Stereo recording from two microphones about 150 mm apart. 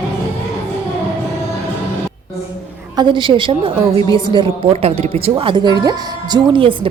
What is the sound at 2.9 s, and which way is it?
Speech, 30° right (ahead or behind).